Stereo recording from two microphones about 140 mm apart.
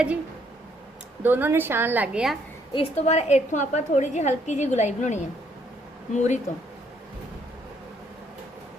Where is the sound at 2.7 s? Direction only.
45° left (ahead or behind).